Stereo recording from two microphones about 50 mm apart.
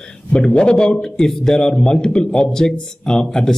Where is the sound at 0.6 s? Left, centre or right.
Centre.